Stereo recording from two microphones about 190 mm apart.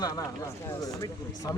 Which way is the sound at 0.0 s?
20° left (ahead or behind).